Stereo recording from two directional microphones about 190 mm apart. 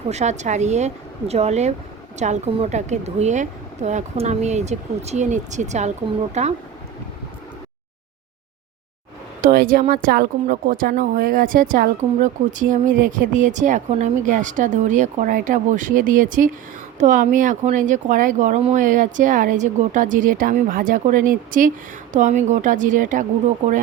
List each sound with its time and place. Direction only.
0.1 s a woman's voice: 35° right (ahead or behind)
9.4 s a woman's voice: 50° right (ahead or behind)